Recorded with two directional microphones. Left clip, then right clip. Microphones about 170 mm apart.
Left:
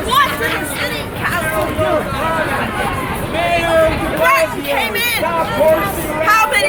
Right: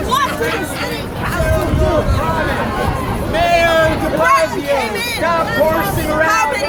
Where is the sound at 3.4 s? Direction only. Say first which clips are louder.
Right 1 dB; 40° right (ahead or behind).